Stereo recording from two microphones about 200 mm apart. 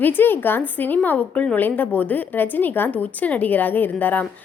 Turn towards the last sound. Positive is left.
turn(degrees=10)  # may be behind; listen again after turning